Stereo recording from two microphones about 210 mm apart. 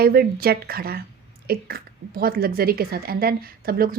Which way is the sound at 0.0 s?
45° right (ahead or behind).